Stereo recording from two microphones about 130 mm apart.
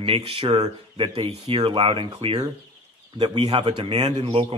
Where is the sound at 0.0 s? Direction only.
45° right (ahead or behind).